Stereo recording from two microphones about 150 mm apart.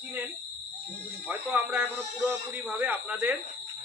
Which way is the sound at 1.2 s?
15° right (ahead or behind).